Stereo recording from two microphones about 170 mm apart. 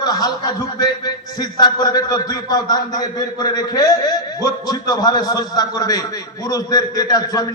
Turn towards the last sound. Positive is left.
turn(degrees=20)  # may be behind; listen again after turning